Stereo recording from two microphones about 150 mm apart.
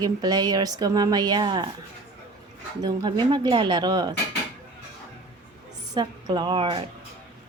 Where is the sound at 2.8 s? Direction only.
30° right (ahead or behind).